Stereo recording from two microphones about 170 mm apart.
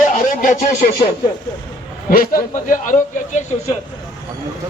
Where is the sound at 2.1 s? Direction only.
55° left (ahead or behind).